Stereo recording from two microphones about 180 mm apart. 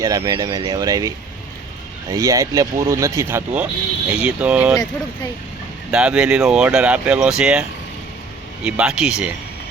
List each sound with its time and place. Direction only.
0.0 s speech: 20° right (ahead or behind)
5.9 s speech: 5° right (ahead or behind)
8.6 s speech: 5° right (ahead or behind)